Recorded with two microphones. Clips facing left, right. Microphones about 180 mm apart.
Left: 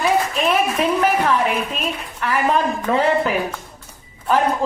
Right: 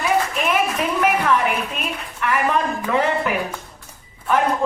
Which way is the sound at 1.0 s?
30° left (ahead or behind).